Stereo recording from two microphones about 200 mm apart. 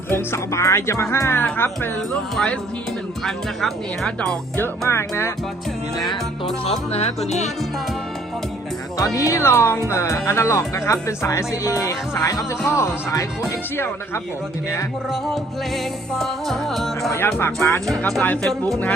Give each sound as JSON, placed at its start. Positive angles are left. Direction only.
{"t": 0.1, "sound": "speech", "side_deg": 15}
{"t": 2.3, "sound": "music", "side_deg": 5}
{"t": 3.2, "sound": "speech", "side_deg": 0}
{"t": 6.7, "sound": "music", "side_deg": 30}
{"t": 9.0, "sound": "speech", "side_deg": 15}
{"t": 16.1, "sound": "music", "side_deg": 0}
{"t": 17.1, "sound": "speech", "side_deg": 15}
{"t": 17.8, "sound": "speech", "side_deg": 0}